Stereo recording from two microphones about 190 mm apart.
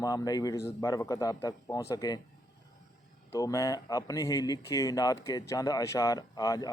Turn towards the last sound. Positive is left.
turn(degrees=20)  # may be behind; listen again after turning